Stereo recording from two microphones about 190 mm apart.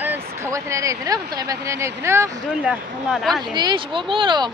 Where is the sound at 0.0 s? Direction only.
10° right (ahead or behind).